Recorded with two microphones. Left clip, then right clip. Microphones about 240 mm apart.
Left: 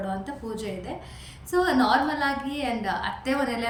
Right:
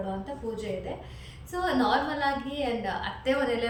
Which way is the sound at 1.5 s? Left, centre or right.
Centre.